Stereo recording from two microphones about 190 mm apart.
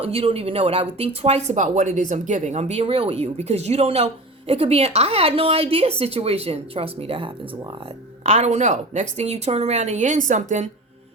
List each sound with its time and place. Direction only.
0.0 s speech: 30° right (ahead or behind)